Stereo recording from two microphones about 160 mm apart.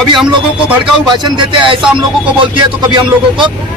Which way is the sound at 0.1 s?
5° right (ahead or behind).